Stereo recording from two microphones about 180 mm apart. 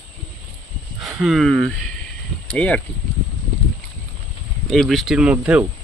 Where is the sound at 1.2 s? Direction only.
Centre (ahead or behind).